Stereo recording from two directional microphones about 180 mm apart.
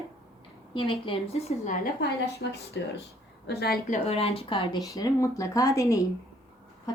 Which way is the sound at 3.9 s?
35° left (ahead or behind).